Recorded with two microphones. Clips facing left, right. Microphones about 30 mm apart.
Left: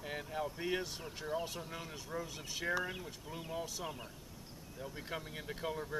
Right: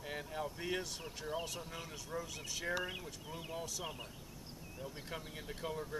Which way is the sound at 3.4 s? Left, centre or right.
Centre.